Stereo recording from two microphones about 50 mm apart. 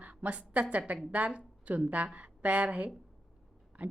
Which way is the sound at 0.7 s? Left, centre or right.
Right.